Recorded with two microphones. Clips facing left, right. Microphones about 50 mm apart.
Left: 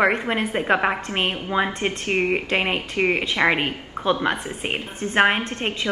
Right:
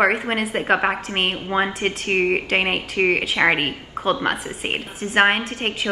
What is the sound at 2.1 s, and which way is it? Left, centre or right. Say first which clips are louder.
Speech: right 2 dB; right.